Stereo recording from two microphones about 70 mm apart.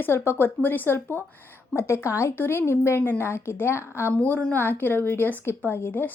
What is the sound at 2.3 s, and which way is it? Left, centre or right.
Speech, left.